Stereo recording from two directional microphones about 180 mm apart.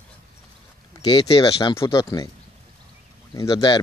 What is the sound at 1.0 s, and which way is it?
Speech, 25° left (ahead or behind).